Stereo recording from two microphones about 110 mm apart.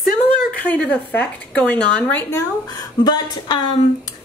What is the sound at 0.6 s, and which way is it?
A woman's voice, 15° left (ahead or behind).